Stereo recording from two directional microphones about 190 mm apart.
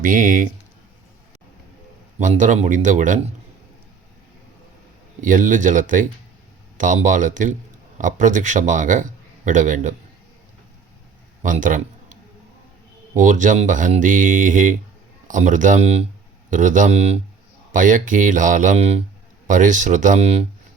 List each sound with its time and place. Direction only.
0.0 s speech: 45° right (ahead or behind)
2.1 s a man's voice: 40° right (ahead or behind)
5.2 s a man's voice: 45° right (ahead or behind)
11.4 s a man's voice: 45° right (ahead or behind)
13.1 s a man's voice: 40° right (ahead or behind)